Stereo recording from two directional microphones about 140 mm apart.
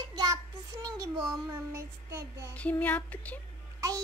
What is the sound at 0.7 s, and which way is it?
Child singing, 25° right (ahead or behind).